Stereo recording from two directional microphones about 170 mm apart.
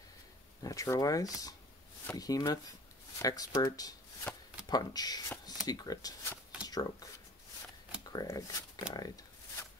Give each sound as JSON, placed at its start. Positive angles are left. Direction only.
{"t": 0.6, "sound": "speech", "side_deg": 20}
{"t": 8.1, "sound": "speech", "side_deg": 20}
{"t": 8.9, "sound": "a sound", "side_deg": 20}